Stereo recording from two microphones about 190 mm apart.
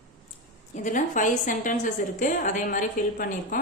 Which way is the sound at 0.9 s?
40° left (ahead or behind).